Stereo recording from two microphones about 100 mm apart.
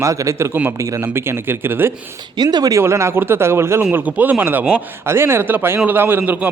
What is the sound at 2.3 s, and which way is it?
Speech, 45° right (ahead or behind).